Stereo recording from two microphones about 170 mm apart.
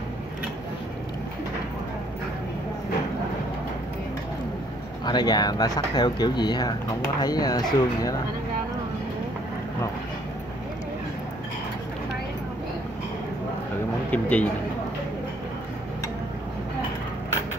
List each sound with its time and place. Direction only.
5.0 s speech: 25° left (ahead or behind)
14.1 s a man's voice: 10° left (ahead or behind)